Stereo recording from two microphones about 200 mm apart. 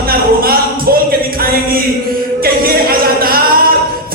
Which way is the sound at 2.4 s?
50° right (ahead or behind).